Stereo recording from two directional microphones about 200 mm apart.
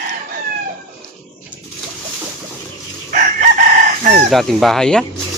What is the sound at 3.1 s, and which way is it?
Chicken, 45° right (ahead or behind).